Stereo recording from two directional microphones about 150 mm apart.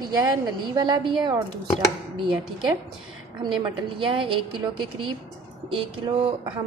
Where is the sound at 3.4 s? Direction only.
30° right (ahead or behind).